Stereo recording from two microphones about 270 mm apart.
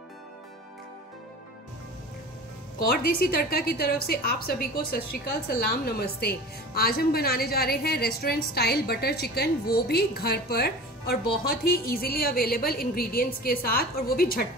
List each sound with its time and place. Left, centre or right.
2.8 s a woman's voice: left